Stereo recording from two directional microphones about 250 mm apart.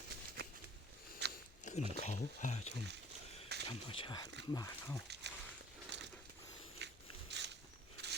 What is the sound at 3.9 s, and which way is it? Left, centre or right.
Speech, centre.